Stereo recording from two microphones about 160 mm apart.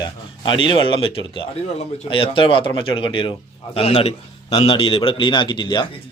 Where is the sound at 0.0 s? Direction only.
30° left (ahead or behind).